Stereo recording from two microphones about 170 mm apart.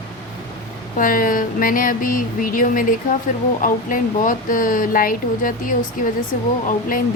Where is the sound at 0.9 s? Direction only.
55° left (ahead or behind).